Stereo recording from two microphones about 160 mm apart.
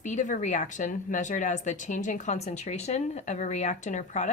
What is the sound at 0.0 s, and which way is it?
Speech, 50° left (ahead or behind).